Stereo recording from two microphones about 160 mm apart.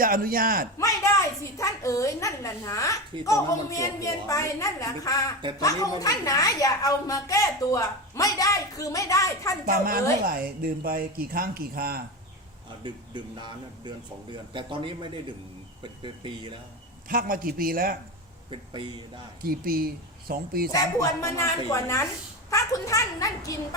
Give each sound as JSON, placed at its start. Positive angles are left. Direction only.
{"t": 0.0, "sound": "speech", "side_deg": -60}
{"t": 0.8, "sound": "a woman's voice", "side_deg": 20}
{"t": 9.6, "sound": "speech", "side_deg": -65}
{"t": 12.8, "sound": "speech", "side_deg": -30}
{"t": 17.1, "sound": "speech", "side_deg": -60}
{"t": 18.5, "sound": "speech", "side_deg": -30}
{"t": 19.4, "sound": "speech", "side_deg": -65}
{"t": 20.7, "sound": "a woman's voice", "side_deg": 20}